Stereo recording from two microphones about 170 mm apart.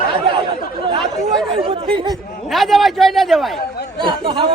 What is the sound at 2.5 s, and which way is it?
Speech, centre (ahead or behind).